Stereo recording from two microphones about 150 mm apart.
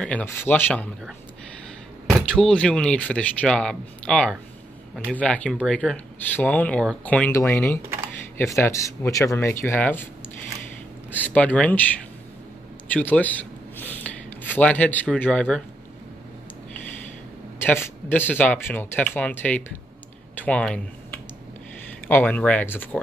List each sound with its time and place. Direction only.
0.0 s speech: 10° left (ahead or behind)
2.0 s speech: 5° left (ahead or behind)
11.1 s a man's voice: 10° left (ahead or behind)
17.6 s speech: 15° left (ahead or behind)